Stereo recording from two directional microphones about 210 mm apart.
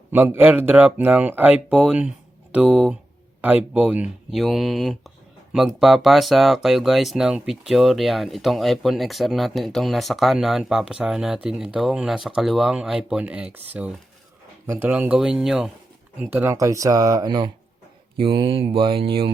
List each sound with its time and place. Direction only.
0.1 s speech: 10° right (ahead or behind); by 19.3 s 25° right (ahead or behind)